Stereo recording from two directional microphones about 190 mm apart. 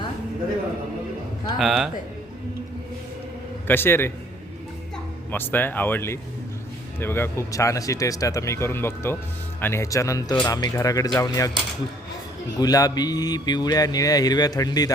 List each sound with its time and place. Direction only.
1.5 s speech: centre (ahead or behind)
3.7 s speech: 10° left (ahead or behind)
5.3 s speech: 10° left (ahead or behind)
12.5 s speech: 20° left (ahead or behind)